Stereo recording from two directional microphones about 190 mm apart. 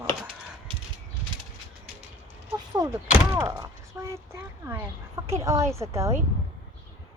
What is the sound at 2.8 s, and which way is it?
Speech, 20° right (ahead or behind).